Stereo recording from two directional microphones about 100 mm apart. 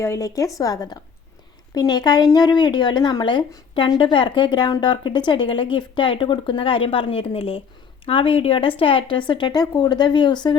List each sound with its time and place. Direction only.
0.0 s speech: 30° left (ahead or behind); by 3.9 s 45° left (ahead or behind)
3.9 s speech: 60° left (ahead or behind)